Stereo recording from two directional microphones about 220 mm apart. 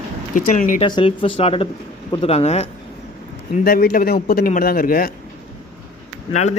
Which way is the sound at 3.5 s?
40° left (ahead or behind).